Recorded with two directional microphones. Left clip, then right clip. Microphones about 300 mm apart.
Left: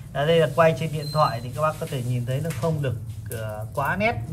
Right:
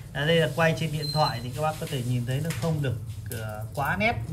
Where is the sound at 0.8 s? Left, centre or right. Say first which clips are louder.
Left 4 dB; centre.